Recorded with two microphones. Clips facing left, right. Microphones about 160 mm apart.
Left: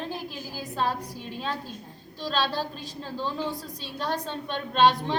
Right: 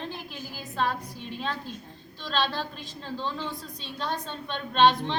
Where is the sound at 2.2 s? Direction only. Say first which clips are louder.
Left 1 dB; 10° left (ahead or behind).